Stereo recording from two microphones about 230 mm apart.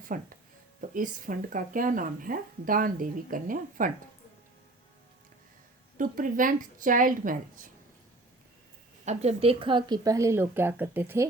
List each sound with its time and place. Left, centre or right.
0.0 s speech: right
6.0 s speech: right
9.0 s speech: right; by 11.3 s centre